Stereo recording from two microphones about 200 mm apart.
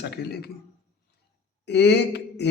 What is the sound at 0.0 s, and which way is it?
Speech, 55° left (ahead or behind).